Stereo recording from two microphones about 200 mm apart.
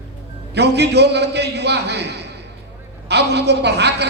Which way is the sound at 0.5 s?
55° right (ahead or behind).